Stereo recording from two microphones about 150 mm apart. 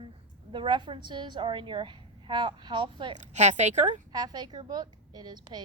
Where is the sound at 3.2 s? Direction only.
50° right (ahead or behind).